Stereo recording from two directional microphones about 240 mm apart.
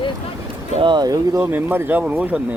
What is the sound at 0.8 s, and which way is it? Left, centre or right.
Speech, centre.